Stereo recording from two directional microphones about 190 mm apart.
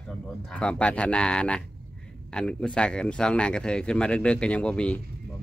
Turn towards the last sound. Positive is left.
turn(degrees=5)  # may be behind; listen again after turning